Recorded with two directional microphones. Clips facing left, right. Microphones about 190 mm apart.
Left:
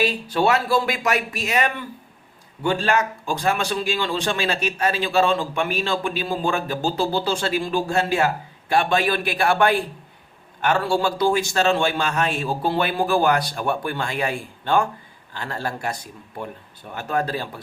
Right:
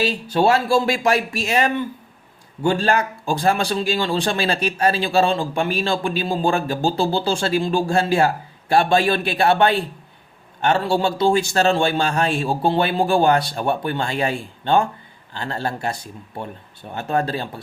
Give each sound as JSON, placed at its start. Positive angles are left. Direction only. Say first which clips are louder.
{"t": 0.0, "sound": "a man's voice", "louder": "right 2 dB", "side_deg": -30}